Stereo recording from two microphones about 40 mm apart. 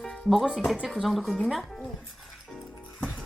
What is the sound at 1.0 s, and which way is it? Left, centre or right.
Speech, centre.